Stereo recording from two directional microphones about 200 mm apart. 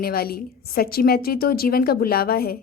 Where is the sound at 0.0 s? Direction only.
50° left (ahead or behind).